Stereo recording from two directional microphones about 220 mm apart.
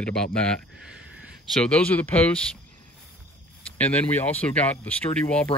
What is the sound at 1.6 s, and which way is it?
Speech, 5° left (ahead or behind).